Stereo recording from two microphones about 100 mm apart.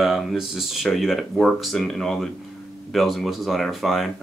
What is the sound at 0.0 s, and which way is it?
Speech, 5° right (ahead or behind).